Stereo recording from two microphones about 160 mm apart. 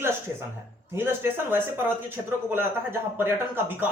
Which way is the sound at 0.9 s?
15° right (ahead or behind).